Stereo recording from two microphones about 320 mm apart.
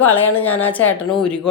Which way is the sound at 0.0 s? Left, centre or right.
Centre.